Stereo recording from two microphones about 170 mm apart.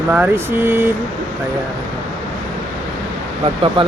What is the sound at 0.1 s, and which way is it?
Speech, 10° right (ahead or behind).